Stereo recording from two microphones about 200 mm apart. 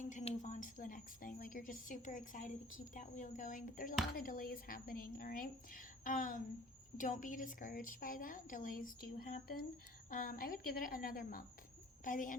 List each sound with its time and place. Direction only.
0.0 s a woman's voice: 40° left (ahead or behind)